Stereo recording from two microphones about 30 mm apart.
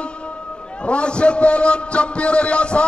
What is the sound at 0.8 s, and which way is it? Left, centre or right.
A man's voice, left.